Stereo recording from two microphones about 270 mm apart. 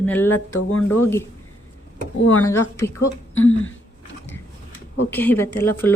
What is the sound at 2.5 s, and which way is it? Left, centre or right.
Speech, centre.